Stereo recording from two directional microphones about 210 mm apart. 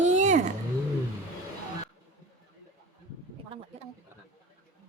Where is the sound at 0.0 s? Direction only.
35° right (ahead or behind).